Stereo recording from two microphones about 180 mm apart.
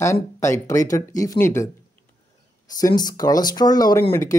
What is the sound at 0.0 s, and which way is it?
Speech, 15° left (ahead or behind).